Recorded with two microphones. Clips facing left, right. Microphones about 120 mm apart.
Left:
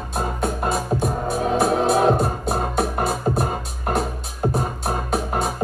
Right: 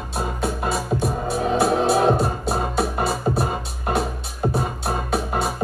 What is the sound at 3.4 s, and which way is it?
Music, 45° left (ahead or behind).